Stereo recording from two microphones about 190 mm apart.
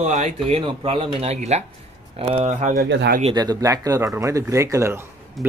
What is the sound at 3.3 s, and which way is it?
Speech, 20° right (ahead or behind).